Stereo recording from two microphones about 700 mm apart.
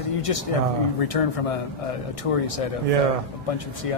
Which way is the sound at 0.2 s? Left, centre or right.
Left.